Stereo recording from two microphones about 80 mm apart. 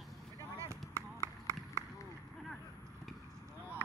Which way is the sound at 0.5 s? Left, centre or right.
Right.